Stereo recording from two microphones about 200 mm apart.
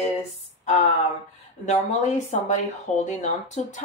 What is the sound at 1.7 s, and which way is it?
Speech, 35° left (ahead or behind).